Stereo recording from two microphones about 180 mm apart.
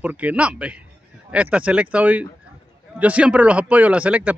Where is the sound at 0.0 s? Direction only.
10° right (ahead or behind).